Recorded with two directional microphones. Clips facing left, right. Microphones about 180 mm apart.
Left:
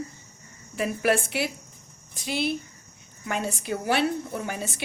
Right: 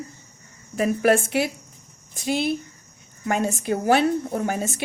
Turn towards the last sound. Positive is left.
turn(degrees=-45)  # may be behind; listen again after turning